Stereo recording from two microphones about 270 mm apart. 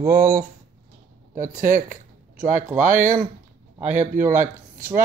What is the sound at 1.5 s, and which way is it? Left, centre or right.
Speech, right.